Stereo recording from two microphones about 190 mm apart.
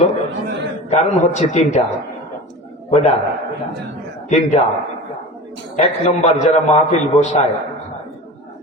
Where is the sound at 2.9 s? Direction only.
35° left (ahead or behind).